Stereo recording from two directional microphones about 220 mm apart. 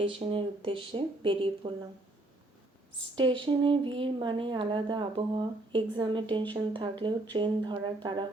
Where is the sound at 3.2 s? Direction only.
20° right (ahead or behind).